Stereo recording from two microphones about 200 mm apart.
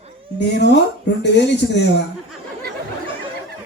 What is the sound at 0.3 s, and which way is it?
A man's voice, 60° left (ahead or behind).